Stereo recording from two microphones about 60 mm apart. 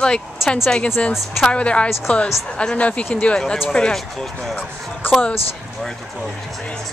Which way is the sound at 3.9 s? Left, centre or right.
Centre.